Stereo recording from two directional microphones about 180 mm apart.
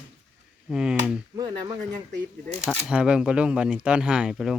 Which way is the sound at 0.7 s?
5° right (ahead or behind).